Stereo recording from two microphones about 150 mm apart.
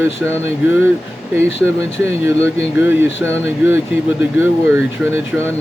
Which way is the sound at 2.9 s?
15° right (ahead or behind).